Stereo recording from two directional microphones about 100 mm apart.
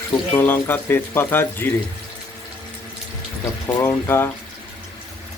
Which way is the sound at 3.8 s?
25° left (ahead or behind).